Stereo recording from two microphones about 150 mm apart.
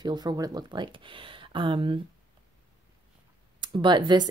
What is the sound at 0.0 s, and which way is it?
Speech, 30° right (ahead or behind).